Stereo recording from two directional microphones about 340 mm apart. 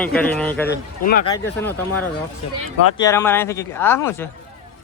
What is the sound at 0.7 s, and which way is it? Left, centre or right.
Speech, left.